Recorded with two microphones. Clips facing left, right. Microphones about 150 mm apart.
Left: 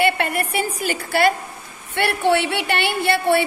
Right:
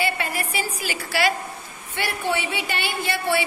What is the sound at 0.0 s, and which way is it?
A woman's voice, 60° left (ahead or behind).